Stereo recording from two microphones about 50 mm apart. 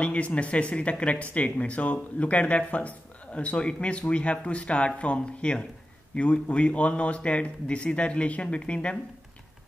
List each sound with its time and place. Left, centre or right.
0.0 s speech: left